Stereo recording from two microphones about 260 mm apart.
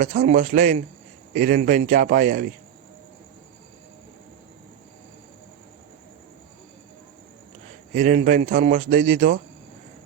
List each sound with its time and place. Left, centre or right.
0.0 s a man's voice: right
7.9 s a man's voice: right